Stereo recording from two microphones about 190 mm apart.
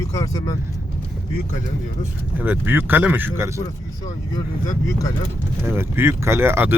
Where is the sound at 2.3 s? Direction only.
10° right (ahead or behind).